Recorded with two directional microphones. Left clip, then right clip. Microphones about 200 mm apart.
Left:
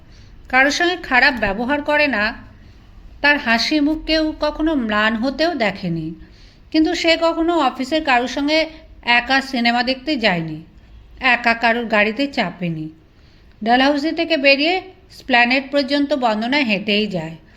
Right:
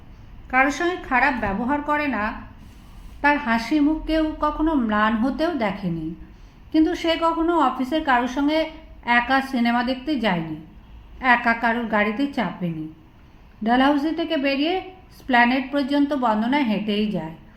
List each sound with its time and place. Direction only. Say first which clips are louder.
0.4 s a woman's voice: left 5 dB; 45° left (ahead or behind)
2.0 s a woman's voice: left 6 dB; 60° left (ahead or behind)
3.4 s a woman's voice: left 4 dB; 35° left (ahead or behind)